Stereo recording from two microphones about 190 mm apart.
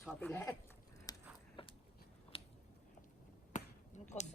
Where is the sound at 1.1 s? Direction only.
20° left (ahead or behind).